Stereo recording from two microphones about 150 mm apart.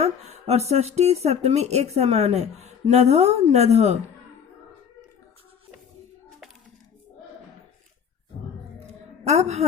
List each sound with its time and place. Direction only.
0.0 s speech: 45° right (ahead or behind)
9.2 s speech: 45° right (ahead or behind)